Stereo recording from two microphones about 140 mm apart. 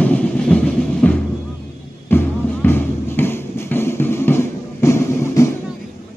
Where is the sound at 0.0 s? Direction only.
10° left (ahead or behind).